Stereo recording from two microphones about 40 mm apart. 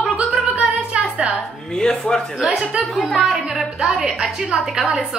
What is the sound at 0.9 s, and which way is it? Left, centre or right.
Music, right.